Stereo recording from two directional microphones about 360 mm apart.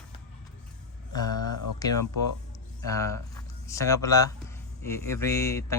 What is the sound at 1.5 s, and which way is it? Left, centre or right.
Speech, left.